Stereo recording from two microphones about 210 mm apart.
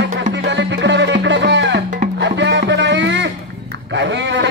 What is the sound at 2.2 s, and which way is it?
Music, 55° right (ahead or behind).